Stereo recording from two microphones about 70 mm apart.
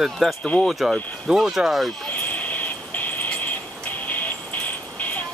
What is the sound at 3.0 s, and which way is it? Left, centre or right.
Vehicle, left.